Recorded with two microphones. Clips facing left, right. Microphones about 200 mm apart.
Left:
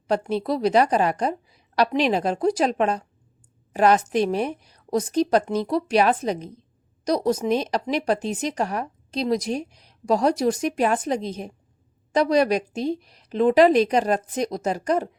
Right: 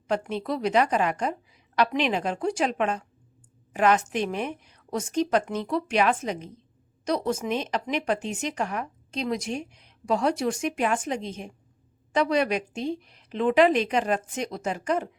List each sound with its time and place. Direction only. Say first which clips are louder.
0.1 s speech: left 4 dB; 35° left (ahead or behind)